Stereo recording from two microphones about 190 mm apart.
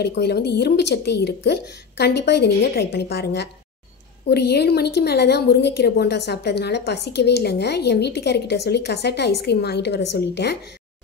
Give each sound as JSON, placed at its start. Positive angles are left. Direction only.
{"t": 0.0, "sound": "a woman's voice", "side_deg": 60}